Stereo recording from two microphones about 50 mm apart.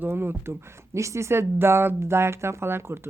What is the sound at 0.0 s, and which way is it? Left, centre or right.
Speech, right.